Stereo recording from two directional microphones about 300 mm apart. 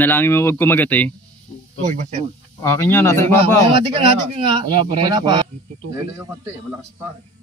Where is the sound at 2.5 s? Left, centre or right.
Centre.